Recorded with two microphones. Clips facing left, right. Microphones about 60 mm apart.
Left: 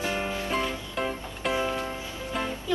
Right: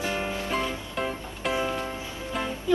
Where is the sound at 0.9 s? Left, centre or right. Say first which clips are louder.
Even; centre.